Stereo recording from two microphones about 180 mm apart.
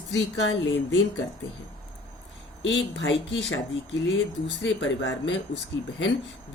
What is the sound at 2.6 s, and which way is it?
Speech, 90° left.